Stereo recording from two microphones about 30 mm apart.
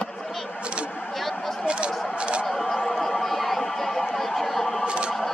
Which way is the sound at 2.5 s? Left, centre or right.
Centre.